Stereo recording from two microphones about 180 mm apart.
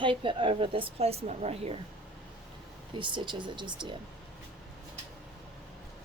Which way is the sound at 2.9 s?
25° right (ahead or behind).